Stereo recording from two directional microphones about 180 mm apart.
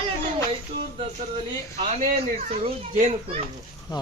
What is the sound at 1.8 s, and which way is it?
A man's voice, 35° right (ahead or behind).